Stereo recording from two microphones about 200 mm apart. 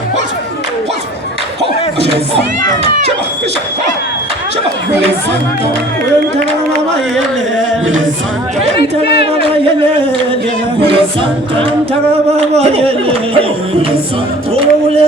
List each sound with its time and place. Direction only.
8.8 s a sound: 55° left (ahead or behind)
10.8 s a capella: 25° right (ahead or behind)
12.4 s speech: 30° right (ahead or behind)
14.5 s music: 30° right (ahead or behind)